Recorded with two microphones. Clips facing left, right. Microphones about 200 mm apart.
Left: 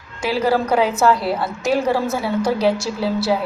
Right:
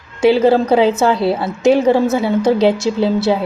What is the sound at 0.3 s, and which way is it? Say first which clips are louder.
A woman's voice: right 7 dB; 25° right (ahead or behind).